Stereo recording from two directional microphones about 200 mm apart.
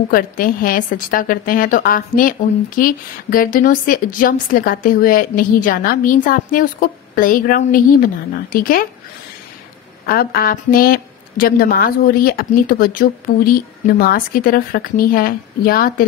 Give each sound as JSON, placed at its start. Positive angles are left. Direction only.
{"t": 0.1, "sound": "a woman's voice", "side_deg": 45}
{"t": 10.0, "sound": "a woman's voice", "side_deg": 50}